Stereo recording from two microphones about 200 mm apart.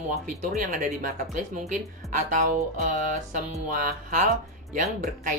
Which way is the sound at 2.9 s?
40° right (ahead or behind).